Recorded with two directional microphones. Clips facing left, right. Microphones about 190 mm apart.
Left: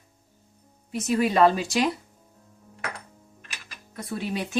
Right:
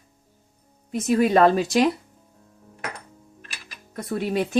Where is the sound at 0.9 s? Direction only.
50° right (ahead or behind).